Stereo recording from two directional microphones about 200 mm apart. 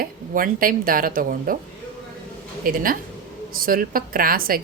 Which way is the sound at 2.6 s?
45° right (ahead or behind).